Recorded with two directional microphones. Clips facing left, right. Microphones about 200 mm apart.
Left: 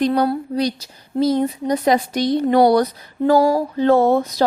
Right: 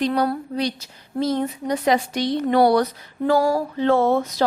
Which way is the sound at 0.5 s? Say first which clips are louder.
Left 4 dB; 40° left (ahead or behind).